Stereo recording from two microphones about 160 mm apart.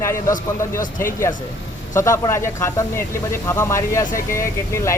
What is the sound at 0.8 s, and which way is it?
Speech, 55° left (ahead or behind).